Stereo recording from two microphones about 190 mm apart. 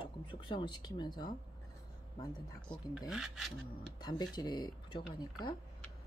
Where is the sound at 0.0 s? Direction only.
25° left (ahead or behind).